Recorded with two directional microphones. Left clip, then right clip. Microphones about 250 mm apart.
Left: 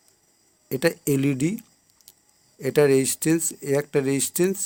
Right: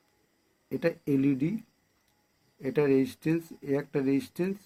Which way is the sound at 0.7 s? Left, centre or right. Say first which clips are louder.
Left 6 dB; left.